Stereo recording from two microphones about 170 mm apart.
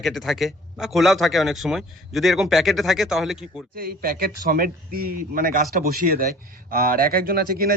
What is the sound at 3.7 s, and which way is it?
Speech, 60° right (ahead or behind).